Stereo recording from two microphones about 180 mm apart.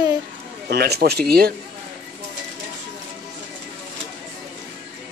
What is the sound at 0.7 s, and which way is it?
Speech, 65° right (ahead or behind).